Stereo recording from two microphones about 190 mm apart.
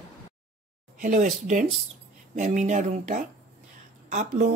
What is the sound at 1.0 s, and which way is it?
Speech, 40° right (ahead or behind).